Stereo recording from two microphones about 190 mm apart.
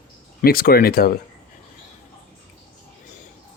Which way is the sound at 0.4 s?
50° left (ahead or behind).